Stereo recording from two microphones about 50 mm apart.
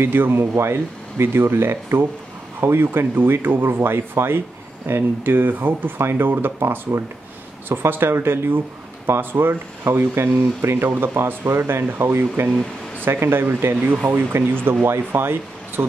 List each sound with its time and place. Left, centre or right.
0.0 s speech: right
0.3 s speech: right
5.9 s speech: right